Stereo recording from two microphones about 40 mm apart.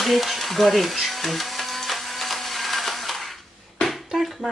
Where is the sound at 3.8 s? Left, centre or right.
Left.